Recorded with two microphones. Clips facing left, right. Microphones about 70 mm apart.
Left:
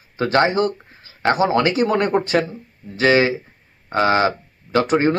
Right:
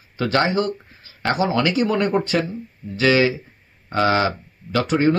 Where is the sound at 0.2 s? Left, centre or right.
Left.